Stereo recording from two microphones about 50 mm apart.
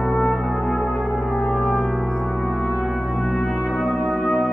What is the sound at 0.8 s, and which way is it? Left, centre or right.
Music, centre.